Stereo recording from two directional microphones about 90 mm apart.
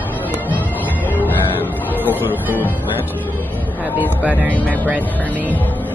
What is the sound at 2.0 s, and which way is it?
Music, 20° left (ahead or behind).